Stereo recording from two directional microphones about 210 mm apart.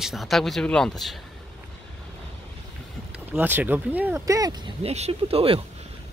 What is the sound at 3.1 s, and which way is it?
Speech, 10° right (ahead or behind).